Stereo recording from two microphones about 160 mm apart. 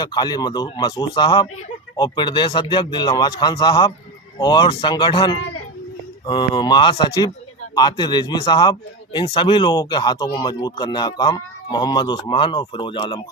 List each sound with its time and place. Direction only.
0.0 s speech: 25° left (ahead or behind)